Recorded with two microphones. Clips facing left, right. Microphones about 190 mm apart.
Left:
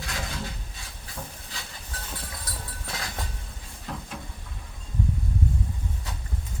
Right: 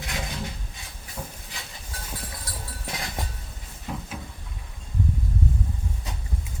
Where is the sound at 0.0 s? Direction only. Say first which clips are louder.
Right 1 dB; 20° right (ahead or behind).